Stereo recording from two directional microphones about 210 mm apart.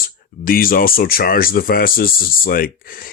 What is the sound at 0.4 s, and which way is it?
Speech, 45° left (ahead or behind).